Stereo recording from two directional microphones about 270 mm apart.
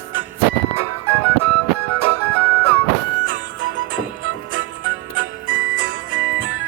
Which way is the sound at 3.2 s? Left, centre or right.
Right.